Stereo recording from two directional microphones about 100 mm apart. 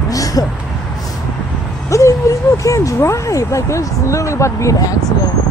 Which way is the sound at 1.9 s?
30° left (ahead or behind).